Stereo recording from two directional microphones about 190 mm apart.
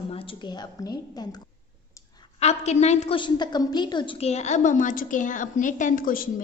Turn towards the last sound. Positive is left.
turn(degrees=45)  # may be behind; listen again after turning